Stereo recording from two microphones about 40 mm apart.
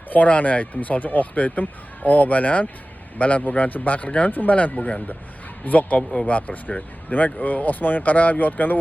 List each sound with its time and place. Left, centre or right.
0.1 s speech: left